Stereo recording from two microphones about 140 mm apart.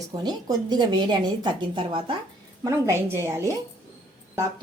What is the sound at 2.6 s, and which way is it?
Speech, 20° right (ahead or behind).